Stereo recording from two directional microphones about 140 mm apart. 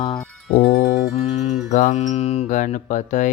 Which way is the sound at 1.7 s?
70° left (ahead or behind).